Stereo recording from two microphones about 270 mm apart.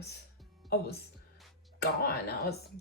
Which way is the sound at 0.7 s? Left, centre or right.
Left.